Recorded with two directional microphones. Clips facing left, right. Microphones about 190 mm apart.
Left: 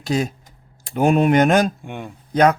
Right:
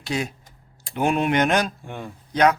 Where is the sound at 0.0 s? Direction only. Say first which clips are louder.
Left 5 dB; 45° left (ahead or behind).